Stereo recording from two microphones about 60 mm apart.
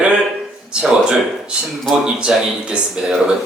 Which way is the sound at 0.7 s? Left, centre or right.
Centre.